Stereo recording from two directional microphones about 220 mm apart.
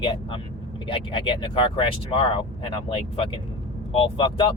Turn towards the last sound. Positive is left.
turn(degrees=25)  # may be behind; listen again after turning